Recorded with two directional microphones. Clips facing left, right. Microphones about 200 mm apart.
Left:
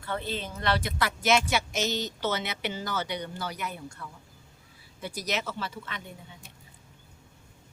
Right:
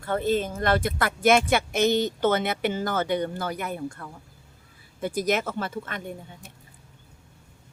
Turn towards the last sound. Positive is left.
turn(degrees=-50)  # may be behind; listen again after turning